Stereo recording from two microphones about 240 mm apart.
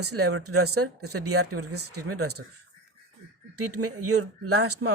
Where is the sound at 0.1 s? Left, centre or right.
Right.